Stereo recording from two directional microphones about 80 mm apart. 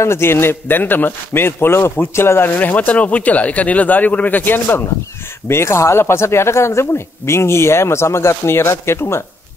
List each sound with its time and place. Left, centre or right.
0.0 s a man's voice: left